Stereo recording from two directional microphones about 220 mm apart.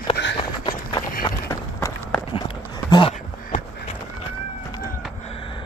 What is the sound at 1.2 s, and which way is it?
Run, 15° left (ahead or behind).